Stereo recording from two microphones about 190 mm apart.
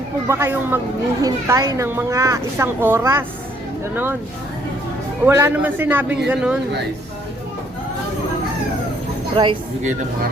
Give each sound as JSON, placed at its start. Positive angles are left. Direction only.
{"t": 0.3, "sound": "speech", "side_deg": -15}
{"t": 5.2, "sound": "speech", "side_deg": -10}
{"t": 9.3, "sound": "speech", "side_deg": -25}